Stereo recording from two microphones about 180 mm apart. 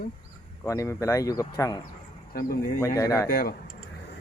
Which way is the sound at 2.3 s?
55° left (ahead or behind).